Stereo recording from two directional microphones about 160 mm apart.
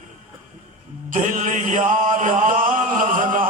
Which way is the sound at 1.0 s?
55° right (ahead or behind).